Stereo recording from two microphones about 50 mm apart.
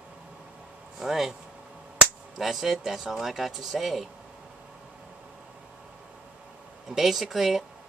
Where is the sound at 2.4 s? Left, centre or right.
Centre.